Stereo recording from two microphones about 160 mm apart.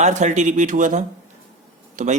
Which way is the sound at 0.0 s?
50° right (ahead or behind).